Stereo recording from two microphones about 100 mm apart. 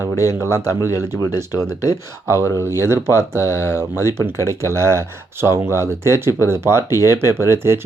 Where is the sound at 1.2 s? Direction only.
40° left (ahead or behind).